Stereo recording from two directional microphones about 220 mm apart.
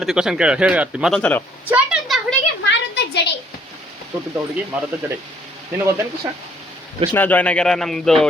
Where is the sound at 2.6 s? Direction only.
50° left (ahead or behind).